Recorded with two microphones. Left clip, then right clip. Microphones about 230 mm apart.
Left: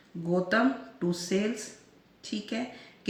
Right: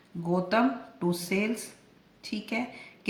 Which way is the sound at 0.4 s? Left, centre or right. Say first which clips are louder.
Right 1 dB; right.